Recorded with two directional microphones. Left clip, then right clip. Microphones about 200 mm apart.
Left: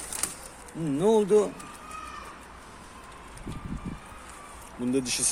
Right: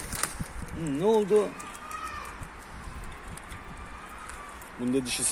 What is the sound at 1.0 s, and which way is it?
Speech, 25° left (ahead or behind).